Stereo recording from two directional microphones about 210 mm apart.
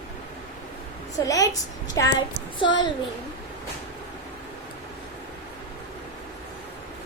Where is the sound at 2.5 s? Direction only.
20° left (ahead or behind).